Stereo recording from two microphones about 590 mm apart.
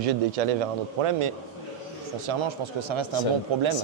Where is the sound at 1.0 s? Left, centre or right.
Right.